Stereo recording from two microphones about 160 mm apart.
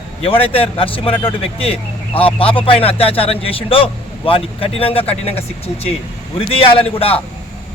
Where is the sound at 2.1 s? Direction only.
35° left (ahead or behind).